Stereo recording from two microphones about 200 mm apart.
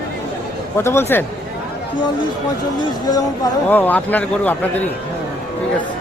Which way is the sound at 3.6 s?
10° left (ahead or behind).